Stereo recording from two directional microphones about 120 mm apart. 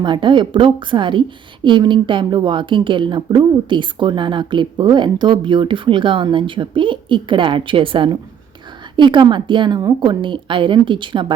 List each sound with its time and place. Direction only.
0.0 s a woman's voice: 40° right (ahead or behind)